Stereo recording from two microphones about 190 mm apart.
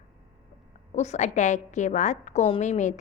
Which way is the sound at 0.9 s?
35° left (ahead or behind).